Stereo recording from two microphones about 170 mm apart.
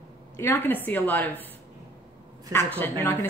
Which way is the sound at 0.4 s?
15° left (ahead or behind).